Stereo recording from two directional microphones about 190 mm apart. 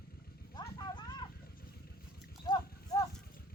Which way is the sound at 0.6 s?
25° left (ahead or behind).